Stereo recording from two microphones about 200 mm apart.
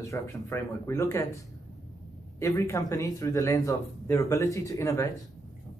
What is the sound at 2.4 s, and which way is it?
Speech, 15° left (ahead or behind).